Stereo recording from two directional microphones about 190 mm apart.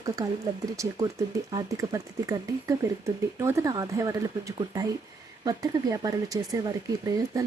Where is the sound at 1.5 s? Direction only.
20° right (ahead or behind).